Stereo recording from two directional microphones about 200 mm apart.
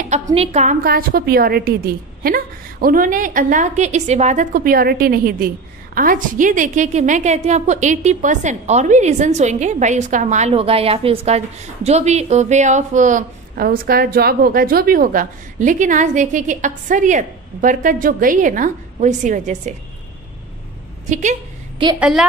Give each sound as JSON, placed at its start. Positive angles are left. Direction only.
{"t": 0.1, "sound": "a woman's voice", "side_deg": -30}
{"t": 0.8, "sound": "a woman's voice", "side_deg": -50}
{"t": 21.1, "sound": "a sound", "side_deg": -35}
{"t": 22.0, "sound": "a woman's voice", "side_deg": -5}